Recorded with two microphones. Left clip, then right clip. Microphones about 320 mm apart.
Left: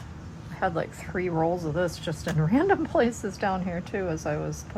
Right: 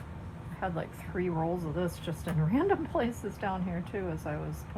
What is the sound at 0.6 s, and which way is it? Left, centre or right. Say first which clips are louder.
Speech: left 8 dB; left.